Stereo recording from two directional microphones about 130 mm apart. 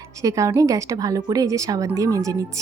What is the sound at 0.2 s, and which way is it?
A woman's voice, 25° right (ahead or behind).